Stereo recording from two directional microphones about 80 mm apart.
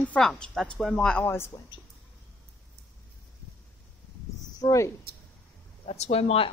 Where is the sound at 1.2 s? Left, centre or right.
Left.